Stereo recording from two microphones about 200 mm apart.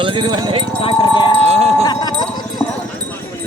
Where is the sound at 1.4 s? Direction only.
30° right (ahead or behind).